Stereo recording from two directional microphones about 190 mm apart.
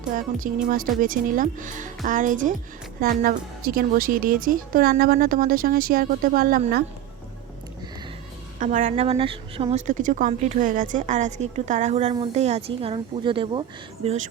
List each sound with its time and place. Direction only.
0.1 s a woman's voice: 45° right (ahead or behind)
8.5 s speech: 45° right (ahead or behind); by 14.2 s 30° right (ahead or behind)